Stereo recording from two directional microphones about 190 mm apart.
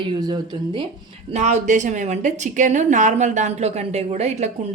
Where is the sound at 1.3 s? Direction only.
35° right (ahead or behind).